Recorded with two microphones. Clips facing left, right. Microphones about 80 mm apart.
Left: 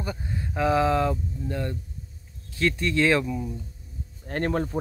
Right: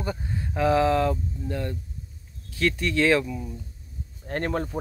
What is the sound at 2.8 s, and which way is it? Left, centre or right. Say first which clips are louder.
Speech: right 1 dB; centre.